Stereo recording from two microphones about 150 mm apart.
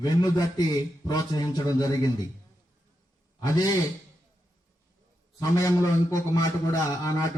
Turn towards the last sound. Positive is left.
turn(degrees=25)  # may be behind; listen again after turning